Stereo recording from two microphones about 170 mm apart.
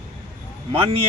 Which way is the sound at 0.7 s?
30° right (ahead or behind).